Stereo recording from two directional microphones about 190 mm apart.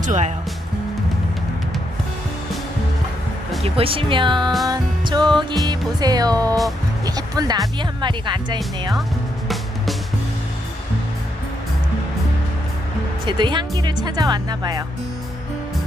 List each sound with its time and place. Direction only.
0.0 s speech: 40° right (ahead or behind)
3.6 s speech: 30° right (ahead or behind)
7.0 s music: 20° right (ahead or behind)
7.8 s speech: 25° right (ahead or behind)
13.2 s speech: 25° right (ahead or behind)